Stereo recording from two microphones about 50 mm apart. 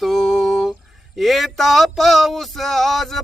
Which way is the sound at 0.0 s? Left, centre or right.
Centre.